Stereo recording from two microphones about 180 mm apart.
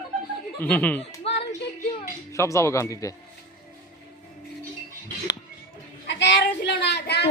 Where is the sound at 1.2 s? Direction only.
35° left (ahead or behind).